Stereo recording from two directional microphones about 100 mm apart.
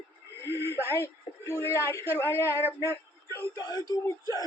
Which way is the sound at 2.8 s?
25° left (ahead or behind).